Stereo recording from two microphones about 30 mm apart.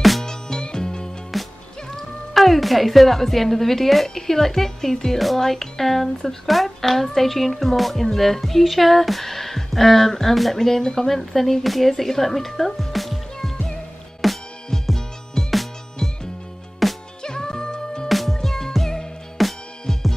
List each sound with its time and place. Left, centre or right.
0.2 s music: left
1.3 s music: centre
2.3 s a woman's voice: centre
10.3 s a woman's voice: centre
10.6 s a woman's voice: centre
14.2 s music: centre
15.4 s music: centre
17.2 s music: left
18.0 s music: centre